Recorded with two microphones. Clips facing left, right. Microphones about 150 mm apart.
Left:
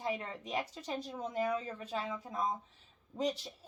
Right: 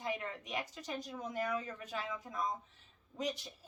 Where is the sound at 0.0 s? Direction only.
30° left (ahead or behind).